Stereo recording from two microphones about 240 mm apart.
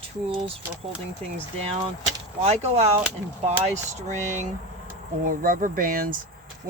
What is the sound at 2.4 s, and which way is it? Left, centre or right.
Speech, right.